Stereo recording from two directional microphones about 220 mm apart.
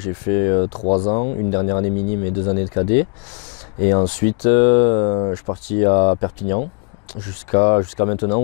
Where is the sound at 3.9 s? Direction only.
20° left (ahead or behind).